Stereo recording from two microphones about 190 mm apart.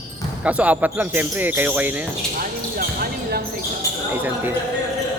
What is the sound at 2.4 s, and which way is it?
Speech, 50° right (ahead or behind).